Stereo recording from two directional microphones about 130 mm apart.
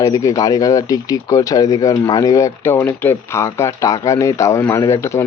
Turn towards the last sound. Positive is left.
turn(degrees=20)  # may be behind; listen again after turning